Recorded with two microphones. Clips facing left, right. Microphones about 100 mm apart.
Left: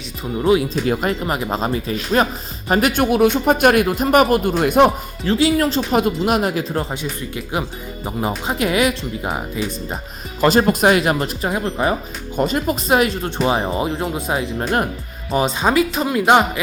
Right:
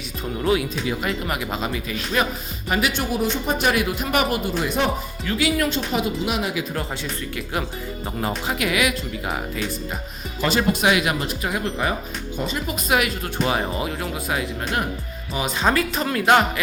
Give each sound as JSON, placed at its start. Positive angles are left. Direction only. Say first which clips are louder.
{"t": 0.4, "sound": "speech", "louder": "left 6 dB", "side_deg": 30}
{"t": 3.1, "sound": "speech", "louder": "left 8 dB", "side_deg": 65}
{"t": 5.2, "sound": "speech", "louder": "left 6 dB", "side_deg": 30}
{"t": 5.9, "sound": "speech", "louder": "left 6 dB", "side_deg": 50}
{"t": 6.9, "sound": "speech", "louder": "left 3 dB", "side_deg": 15}
{"t": 8.4, "sound": "speech", "louder": "left 5 dB", "side_deg": 30}
{"t": 10.4, "sound": "speech", "louder": "left 6 dB", "side_deg": 45}
{"t": 12.4, "sound": "speech", "louder": "left 9 dB", "side_deg": 50}
{"t": 12.7, "sound": "speech", "louder": "left 2 dB", "side_deg": 35}